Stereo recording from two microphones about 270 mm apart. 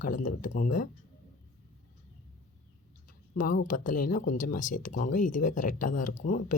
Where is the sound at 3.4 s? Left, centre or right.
Left.